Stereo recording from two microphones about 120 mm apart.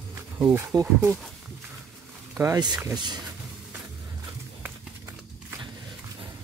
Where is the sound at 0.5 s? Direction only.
25° right (ahead or behind).